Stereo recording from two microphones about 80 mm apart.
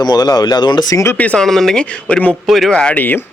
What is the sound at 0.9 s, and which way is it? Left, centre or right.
Speech, left.